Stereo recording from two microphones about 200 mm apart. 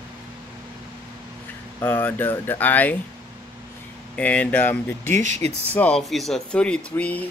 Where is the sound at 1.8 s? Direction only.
10° left (ahead or behind).